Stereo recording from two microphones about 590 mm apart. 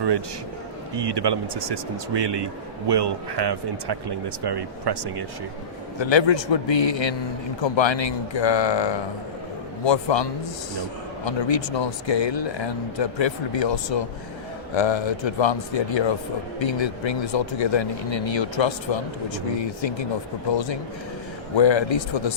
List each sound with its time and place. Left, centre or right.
0.9 s speech: right
6.0 s speech: left
11.3 s speech: left
21.6 s speech: left